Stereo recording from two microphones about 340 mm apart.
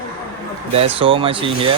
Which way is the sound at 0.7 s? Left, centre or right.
Centre.